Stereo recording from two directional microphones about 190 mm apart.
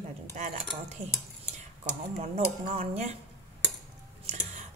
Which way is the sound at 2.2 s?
35° right (ahead or behind).